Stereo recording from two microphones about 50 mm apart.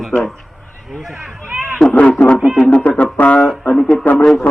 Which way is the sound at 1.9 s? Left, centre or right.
Left.